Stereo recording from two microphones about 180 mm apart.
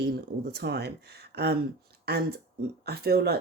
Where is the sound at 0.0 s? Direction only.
65° right (ahead or behind).